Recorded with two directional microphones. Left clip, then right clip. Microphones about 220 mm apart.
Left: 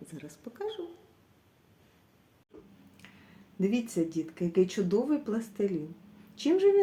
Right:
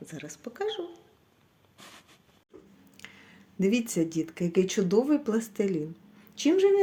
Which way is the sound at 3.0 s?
35° right (ahead or behind).